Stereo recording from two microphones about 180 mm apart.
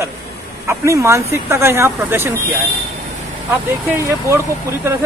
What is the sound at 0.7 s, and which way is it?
Speech, 15° right (ahead or behind).